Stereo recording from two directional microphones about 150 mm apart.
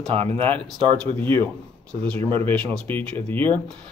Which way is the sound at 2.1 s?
35° right (ahead or behind).